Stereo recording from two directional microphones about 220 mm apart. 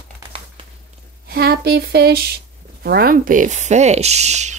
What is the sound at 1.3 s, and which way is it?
Speech, 50° right (ahead or behind).